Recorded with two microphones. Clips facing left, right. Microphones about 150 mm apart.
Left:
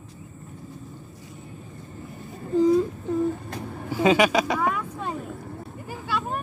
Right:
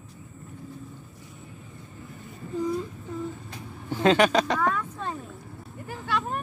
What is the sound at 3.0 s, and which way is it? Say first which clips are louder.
Vehicle: left 9 dB; 55° left (ahead or behind).